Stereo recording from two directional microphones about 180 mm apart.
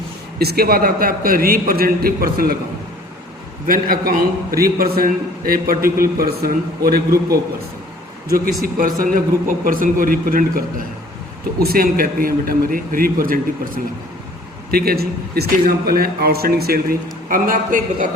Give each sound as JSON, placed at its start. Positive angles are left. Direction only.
{"t": 0.3, "sound": "a man's voice", "side_deg": -60}
{"t": 3.7, "sound": "a man's voice", "side_deg": -50}
{"t": 8.6, "sound": "a man's voice", "side_deg": -50}